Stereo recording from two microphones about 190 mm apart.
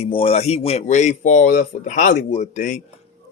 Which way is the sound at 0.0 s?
30° left (ahead or behind).